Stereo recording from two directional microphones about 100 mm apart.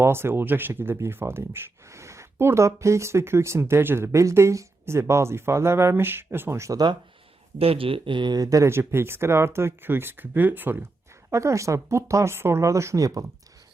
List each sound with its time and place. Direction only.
0.0 s speech: 25° right (ahead or behind)
7.6 s speech: 70° right (ahead or behind); by 10.8 s 20° right (ahead or behind)
11.3 s speech: 30° right (ahead or behind)